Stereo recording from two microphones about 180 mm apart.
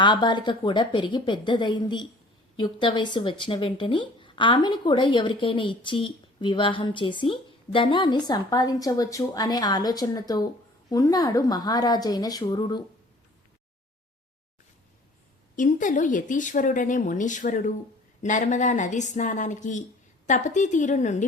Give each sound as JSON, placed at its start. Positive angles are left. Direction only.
{"t": 0.0, "sound": "speech", "side_deg": 25}
{"t": 15.5, "sound": "speech", "side_deg": 45}